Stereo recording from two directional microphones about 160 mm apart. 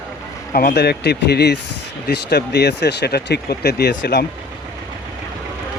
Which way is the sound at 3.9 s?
70° left (ahead or behind).